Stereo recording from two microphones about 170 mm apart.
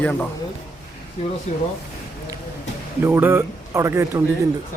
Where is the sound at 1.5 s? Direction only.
45° left (ahead or behind).